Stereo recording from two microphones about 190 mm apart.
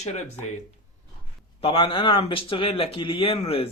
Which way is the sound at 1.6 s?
30° left (ahead or behind).